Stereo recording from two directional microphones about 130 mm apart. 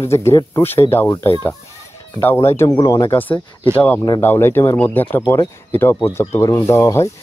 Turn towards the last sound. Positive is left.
turn(degrees=20)  # may be behind; listen again after turning